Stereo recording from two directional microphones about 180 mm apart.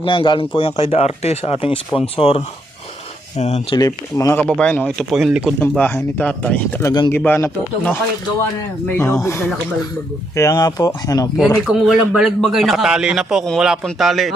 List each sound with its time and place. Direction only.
0.0 s speech: 30° left (ahead or behind)
3.8 s speech: 20° left (ahead or behind)
4.4 s a man's voice: 5° left (ahead or behind)
5.5 s speech: 10° left (ahead or behind)
9.0 s speech: 15° left (ahead or behind)
11.3 s a man's voice: centre (ahead or behind)